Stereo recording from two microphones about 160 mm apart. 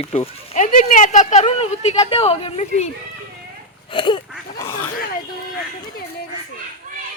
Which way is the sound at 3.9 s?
30° left (ahead or behind).